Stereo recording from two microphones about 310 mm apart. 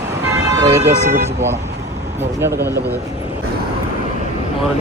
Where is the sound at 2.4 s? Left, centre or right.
Centre.